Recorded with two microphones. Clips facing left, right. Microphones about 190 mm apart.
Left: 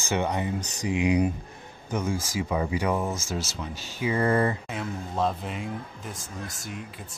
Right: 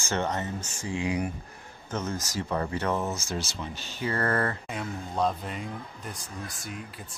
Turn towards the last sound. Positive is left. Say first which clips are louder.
# left 1 dB
turn(degrees=0)  # may be behind; listen again after turning